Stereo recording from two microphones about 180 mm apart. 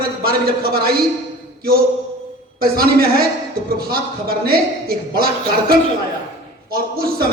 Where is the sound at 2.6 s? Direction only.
55° right (ahead or behind).